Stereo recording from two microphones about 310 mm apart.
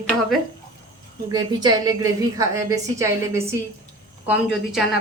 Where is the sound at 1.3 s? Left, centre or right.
Centre.